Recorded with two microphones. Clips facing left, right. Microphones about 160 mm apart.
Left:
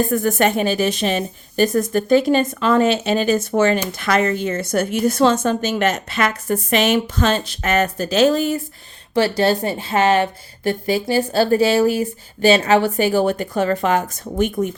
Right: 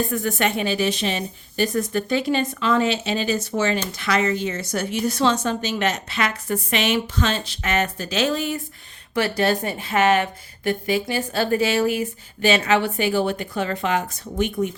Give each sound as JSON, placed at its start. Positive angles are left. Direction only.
{"t": 0.0, "sound": "a woman's voice", "side_deg": 45}
{"t": 9.1, "sound": "a woman's voice", "side_deg": 30}